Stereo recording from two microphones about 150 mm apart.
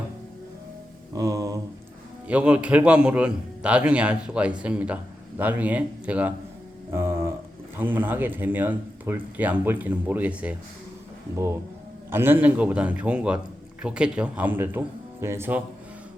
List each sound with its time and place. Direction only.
1.1 s mantra: 25° right (ahead or behind)
2.2 s a man's voice: 10° right (ahead or behind)
6.9 s a sound: 15° right (ahead or behind)
7.8 s a man's voice: 15° right (ahead or behind)
12.1 s a man's voice: 15° right (ahead or behind)